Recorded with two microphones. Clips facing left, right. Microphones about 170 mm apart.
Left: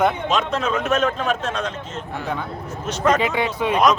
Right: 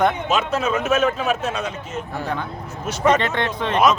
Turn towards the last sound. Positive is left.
turn(degrees=10)  # may be behind; listen again after turning